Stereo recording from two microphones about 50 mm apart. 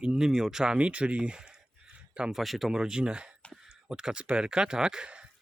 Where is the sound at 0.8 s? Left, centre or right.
Right.